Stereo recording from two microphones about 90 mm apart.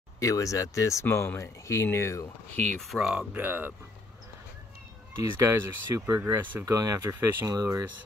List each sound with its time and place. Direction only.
0.2 s speech: 40° left (ahead or behind)
2.5 s speech: 15° left (ahead or behind)
2.8 s speech: 5° right (ahead or behind)
3.3 s speech: 20° right (ahead or behind)
5.1 s speech: 35° right (ahead or behind)
6.1 s speech: 25° right (ahead or behind)
6.6 s speech: 40° right (ahead or behind)